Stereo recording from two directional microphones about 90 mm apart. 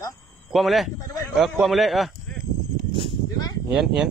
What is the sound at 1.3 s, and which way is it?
Speech, centre (ahead or behind).